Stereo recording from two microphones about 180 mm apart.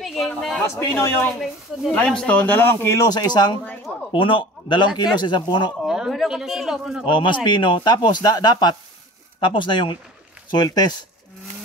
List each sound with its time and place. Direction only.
0.0 s speech: centre (ahead or behind)
0.7 s speech: 15° left (ahead or behind)
5.8 s a man's voice: centre (ahead or behind)
7.1 s speech: 25° left (ahead or behind)